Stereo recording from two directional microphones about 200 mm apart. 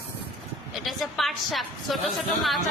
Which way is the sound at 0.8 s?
Centre (ahead or behind).